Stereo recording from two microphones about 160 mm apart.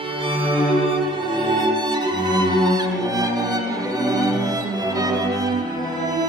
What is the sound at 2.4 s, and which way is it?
Music, 25° right (ahead or behind).